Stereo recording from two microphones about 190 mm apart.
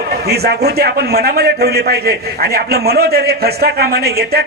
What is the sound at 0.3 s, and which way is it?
A man's voice, 55° right (ahead or behind).